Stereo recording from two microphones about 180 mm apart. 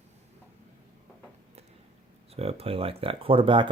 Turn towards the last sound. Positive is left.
turn(degrees=-30)  # may be behind; listen again after turning